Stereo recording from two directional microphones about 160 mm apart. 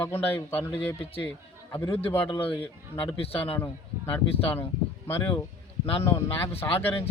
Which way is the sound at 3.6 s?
15° left (ahead or behind).